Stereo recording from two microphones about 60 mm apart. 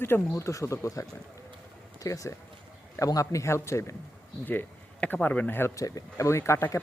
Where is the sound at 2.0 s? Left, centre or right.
Left.